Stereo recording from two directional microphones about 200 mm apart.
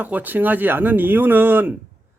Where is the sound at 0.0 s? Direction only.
10° right (ahead or behind).